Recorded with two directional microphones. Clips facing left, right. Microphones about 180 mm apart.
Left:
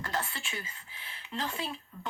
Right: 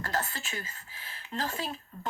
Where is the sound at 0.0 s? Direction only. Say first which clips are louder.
Right 2 dB; 45° right (ahead or behind).